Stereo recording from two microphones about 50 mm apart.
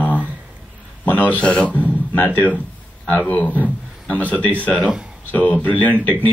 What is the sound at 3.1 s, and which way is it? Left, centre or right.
A man's voice, left.